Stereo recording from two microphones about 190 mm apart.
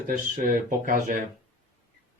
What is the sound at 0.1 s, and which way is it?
Speech, 45° right (ahead or behind).